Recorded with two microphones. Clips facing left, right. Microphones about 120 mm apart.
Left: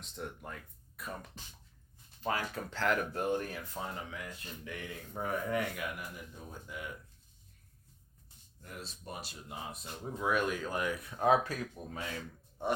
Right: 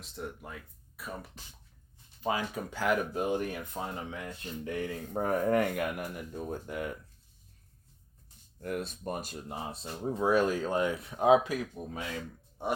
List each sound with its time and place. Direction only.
0.0 s speech: 5° right (ahead or behind)
4.1 s speech: 35° right (ahead or behind); by 6.9 s 55° right (ahead or behind)
8.6 s speech: 55° right (ahead or behind)
9.6 s speech: 30° right (ahead or behind); by 12.0 s 15° right (ahead or behind)